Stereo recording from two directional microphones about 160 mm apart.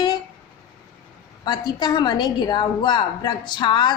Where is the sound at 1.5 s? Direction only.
25° left (ahead or behind).